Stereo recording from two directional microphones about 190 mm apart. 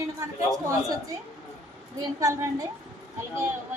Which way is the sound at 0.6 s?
15° right (ahead or behind).